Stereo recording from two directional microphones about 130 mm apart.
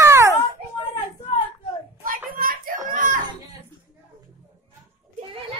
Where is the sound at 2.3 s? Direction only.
90° right.